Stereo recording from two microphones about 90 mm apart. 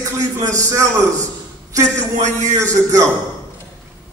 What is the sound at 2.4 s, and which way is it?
Speech, 35° right (ahead or behind).